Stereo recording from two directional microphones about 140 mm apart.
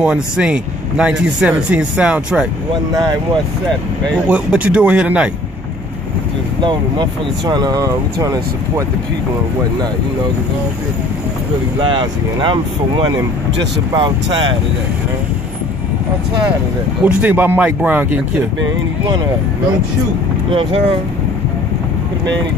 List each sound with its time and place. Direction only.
0.0 s speech: 5° right (ahead or behind)
4.1 s speech: 10° right (ahead or behind)
6.6 s speech: 35° right (ahead or behind)
11.8 s speech: 35° right (ahead or behind)
17.0 s speech: 10° right (ahead or behind)